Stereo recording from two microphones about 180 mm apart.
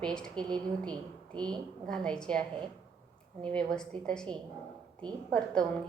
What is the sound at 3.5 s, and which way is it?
A woman's voice, 5° left (ahead or behind).